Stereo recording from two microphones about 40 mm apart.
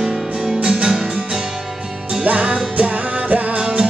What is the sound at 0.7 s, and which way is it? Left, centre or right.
Music, centre.